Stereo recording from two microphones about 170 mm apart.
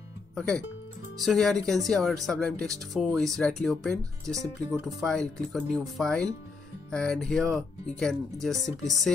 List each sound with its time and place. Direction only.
1.2 s speech: centre (ahead or behind)
4.4 s speech: 10° right (ahead or behind)
4.8 s speech: centre (ahead or behind)